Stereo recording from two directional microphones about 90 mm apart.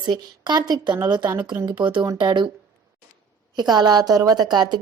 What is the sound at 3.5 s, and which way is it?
A woman's voice, 50° right (ahead or behind).